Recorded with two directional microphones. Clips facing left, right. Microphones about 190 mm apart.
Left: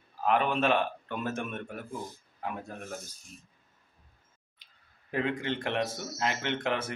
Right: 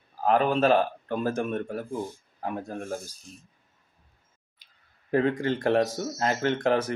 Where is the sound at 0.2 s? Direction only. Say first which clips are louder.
Right 5 dB; 35° right (ahead or behind).